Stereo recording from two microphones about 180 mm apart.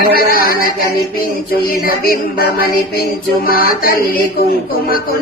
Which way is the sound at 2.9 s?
55° left (ahead or behind).